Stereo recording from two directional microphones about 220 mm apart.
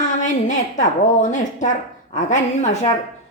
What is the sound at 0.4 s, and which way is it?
A woman's voice, 35° left (ahead or behind).